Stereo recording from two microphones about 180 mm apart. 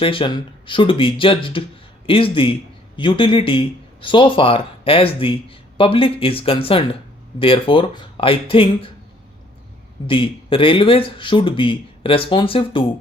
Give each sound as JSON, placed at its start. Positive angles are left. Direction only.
{"t": 0.0, "sound": "speech", "side_deg": 30}
{"t": 10.1, "sound": "speech", "side_deg": 30}